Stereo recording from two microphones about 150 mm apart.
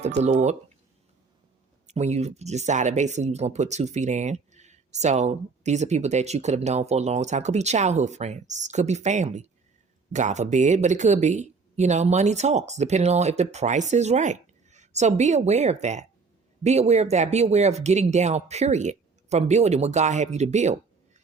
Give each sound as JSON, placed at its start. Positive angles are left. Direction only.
{"t": 0.0, "sound": "speech", "side_deg": -50}
{"t": 1.9, "sound": "speech", "side_deg": -50}